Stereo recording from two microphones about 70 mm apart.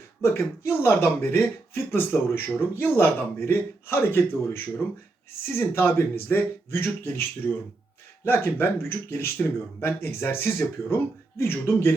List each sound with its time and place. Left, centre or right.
0.2 s speech: left